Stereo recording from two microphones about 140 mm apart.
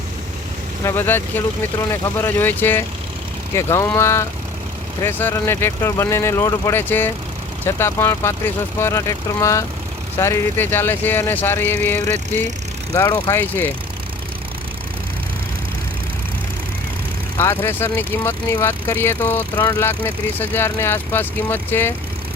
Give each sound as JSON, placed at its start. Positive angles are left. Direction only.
{"t": 0.9, "sound": "speech", "side_deg": 15}
{"t": 13.3, "sound": "speech", "side_deg": 15}
{"t": 17.3, "sound": "speech", "side_deg": 15}